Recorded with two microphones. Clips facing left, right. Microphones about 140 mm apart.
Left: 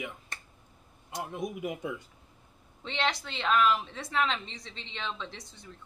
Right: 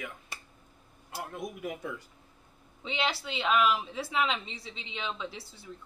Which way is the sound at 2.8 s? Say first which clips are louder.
Left 1 dB; 5° right (ahead or behind).